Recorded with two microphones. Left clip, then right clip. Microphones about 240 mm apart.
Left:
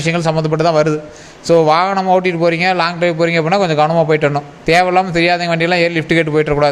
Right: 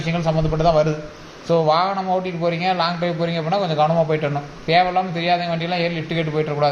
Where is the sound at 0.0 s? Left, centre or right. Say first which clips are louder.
Left 6 dB; left.